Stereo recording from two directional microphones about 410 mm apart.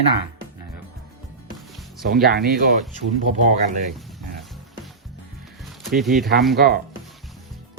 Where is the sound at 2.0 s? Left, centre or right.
Right.